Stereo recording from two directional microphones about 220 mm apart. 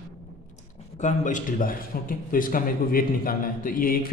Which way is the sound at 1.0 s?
35° left (ahead or behind).